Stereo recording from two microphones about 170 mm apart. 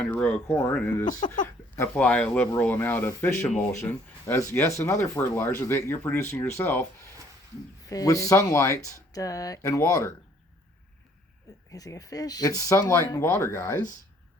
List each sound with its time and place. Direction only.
0.0 s speech: 5° left (ahead or behind)
1.0 s speech: 20° left (ahead or behind)
11.7 s speech: 20° left (ahead or behind)